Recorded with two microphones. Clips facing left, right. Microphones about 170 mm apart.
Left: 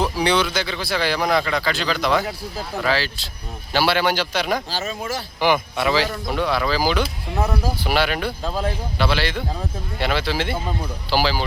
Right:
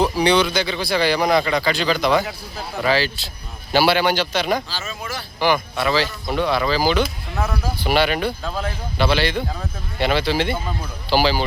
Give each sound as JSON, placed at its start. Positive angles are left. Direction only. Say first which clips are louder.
{"t": 0.0, "sound": "speech", "louder": "right 3 dB", "side_deg": 5}
{"t": 4.8, "sound": "speech", "louder": "left 4 dB", "side_deg": 35}
{"t": 5.4, "sound": "speech", "louder": "even", "side_deg": 15}
{"t": 6.2, "sound": "speech", "louder": "right 1 dB", "side_deg": 0}
{"t": 7.3, "sound": "speech", "louder": "left 2 dB", "side_deg": 15}
{"t": 7.9, "sound": "speech", "louder": "right 4 dB", "side_deg": 0}